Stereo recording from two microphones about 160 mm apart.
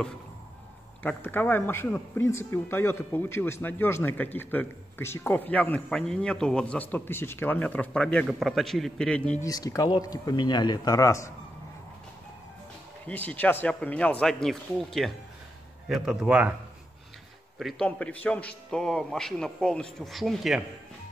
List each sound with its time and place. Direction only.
1.0 s speech: 15° left (ahead or behind)
9.4 s speech: 20° left (ahead or behind)
13.0 s a man's voice: 10° left (ahead or behind); by 16.5 s 10° right (ahead or behind)
17.6 s a man's voice: centre (ahead or behind)